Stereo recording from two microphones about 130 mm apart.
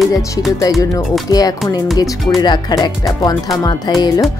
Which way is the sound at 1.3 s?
30° left (ahead or behind).